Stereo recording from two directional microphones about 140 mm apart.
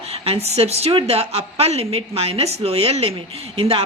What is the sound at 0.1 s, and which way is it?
A woman's voice, 45° right (ahead or behind).